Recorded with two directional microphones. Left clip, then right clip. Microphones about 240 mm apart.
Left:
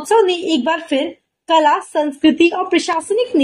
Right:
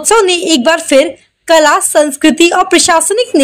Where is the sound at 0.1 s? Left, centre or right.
Right.